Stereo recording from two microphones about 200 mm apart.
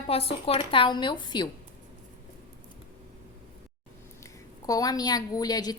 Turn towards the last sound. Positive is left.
turn(degrees=20)  # may be behind; listen again after turning